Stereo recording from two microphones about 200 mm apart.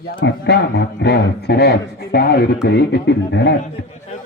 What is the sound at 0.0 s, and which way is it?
A man's voice, 50° left (ahead or behind).